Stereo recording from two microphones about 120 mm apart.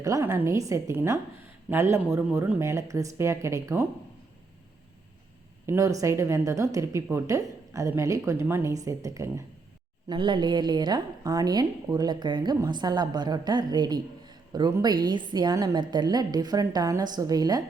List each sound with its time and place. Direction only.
0.0 s a woman's voice: 25° right (ahead or behind)
5.6 s a woman's voice: 25° right (ahead or behind)
10.1 s a woman's voice: 40° right (ahead or behind)